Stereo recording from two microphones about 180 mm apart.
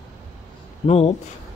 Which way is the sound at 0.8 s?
35° left (ahead or behind).